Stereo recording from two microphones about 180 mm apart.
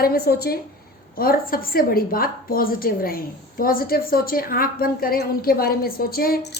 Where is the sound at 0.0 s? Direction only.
60° left (ahead or behind).